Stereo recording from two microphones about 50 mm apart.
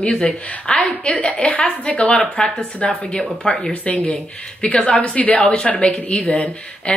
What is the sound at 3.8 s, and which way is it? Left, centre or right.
A woman's voice, left.